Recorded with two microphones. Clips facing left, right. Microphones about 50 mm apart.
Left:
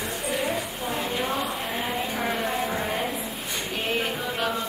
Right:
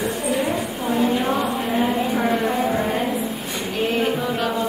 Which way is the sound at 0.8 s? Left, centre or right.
Centre.